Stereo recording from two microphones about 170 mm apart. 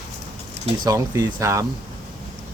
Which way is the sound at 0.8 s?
20° right (ahead or behind).